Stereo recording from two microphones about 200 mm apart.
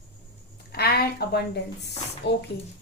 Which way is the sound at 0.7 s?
50° left (ahead or behind).